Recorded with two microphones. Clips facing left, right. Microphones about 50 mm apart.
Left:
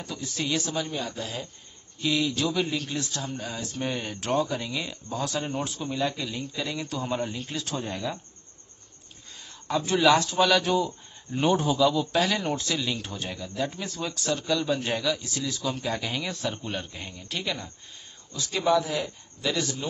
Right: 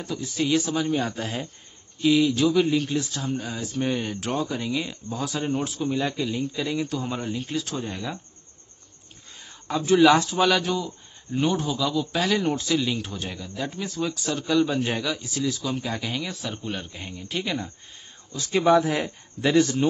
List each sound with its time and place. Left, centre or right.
0.0 s a man's voice: centre
0.9 s a man's voice: right
2.0 s a man's voice: centre
9.7 s a man's voice: centre
11.5 s a man's voice: centre
11.8 s a man's voice: centre
18.3 s a man's voice: right